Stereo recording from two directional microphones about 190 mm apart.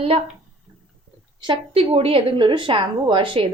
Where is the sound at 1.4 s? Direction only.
30° right (ahead or behind).